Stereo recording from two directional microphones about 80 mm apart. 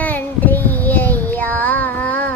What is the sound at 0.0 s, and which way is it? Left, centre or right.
Child singing, left.